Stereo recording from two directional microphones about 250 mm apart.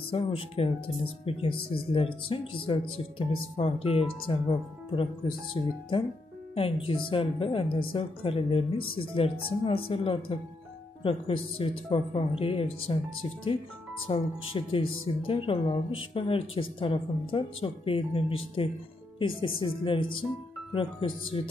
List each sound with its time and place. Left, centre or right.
0.1 s speech: left
14.0 s speech: left